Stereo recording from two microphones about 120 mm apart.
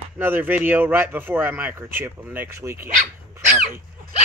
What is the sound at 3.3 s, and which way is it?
Crow, 20° right (ahead or behind).